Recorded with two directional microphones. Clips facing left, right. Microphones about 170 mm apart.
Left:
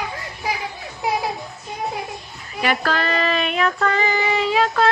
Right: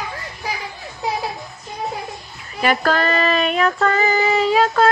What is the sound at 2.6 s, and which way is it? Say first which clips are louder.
Child singing: right 3 dB; 45° right (ahead or behind).